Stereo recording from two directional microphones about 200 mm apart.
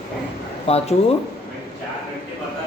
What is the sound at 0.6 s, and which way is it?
Speech, 30° left (ahead or behind).